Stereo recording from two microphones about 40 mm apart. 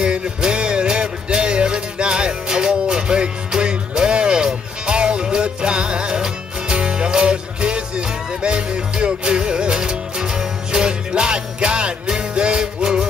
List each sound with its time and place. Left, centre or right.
0.0 s music: right